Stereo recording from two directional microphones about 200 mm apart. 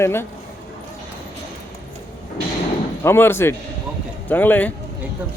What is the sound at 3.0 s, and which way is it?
A man's voice, 10° left (ahead or behind).